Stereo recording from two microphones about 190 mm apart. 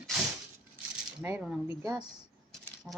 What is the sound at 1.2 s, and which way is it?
Speech, 5° right (ahead or behind).